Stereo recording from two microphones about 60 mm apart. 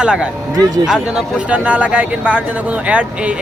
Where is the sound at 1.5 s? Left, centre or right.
Right.